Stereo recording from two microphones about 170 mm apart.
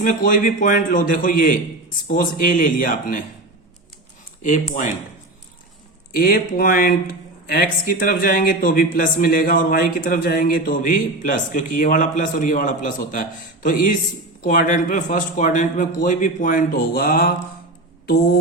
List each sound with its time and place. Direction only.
0.0 s speech: 50° left (ahead or behind)
4.4 s speech: 50° left (ahead or behind)
6.1 s speech: 60° left (ahead or behind)